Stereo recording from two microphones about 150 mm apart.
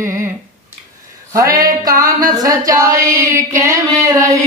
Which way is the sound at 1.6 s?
25° right (ahead or behind).